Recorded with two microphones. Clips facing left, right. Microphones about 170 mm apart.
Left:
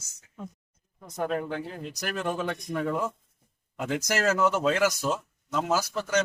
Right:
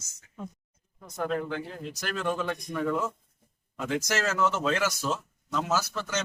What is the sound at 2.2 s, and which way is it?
Speech, 20° left (ahead or behind).